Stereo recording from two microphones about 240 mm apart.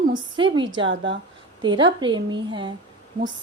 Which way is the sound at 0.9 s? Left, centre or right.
Right.